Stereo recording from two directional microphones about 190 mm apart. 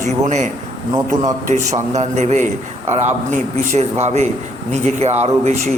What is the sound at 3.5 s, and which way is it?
A man's voice, 35° right (ahead or behind).